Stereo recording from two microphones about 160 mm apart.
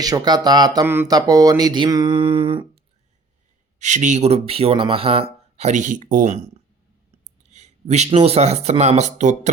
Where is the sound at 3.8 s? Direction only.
50° right (ahead or behind).